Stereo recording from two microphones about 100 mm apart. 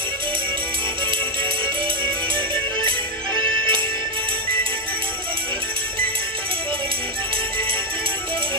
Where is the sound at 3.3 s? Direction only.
55° right (ahead or behind).